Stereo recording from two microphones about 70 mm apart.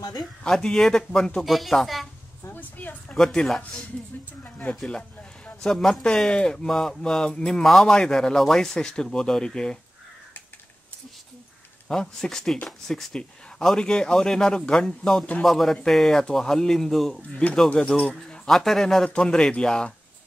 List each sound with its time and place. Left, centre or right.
0.2 s speech: centre
1.4 s speech: centre
2.4 s a sound: left
3.2 s speech: centre
4.4 s a sound: left
4.8 s a sound: centre
6.0 s speech: centre
11.9 s speech: centre
17.6 s speech: centre
18.5 s speech: centre
19.0 s speech: centre